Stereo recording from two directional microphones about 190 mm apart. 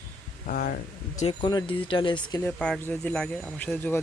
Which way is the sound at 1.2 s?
25° left (ahead or behind).